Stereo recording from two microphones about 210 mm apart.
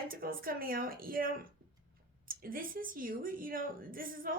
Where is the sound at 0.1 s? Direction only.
45° right (ahead or behind).